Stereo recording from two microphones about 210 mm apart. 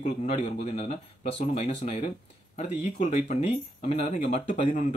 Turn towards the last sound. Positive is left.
turn(degrees=30)  # may be behind; listen again after turning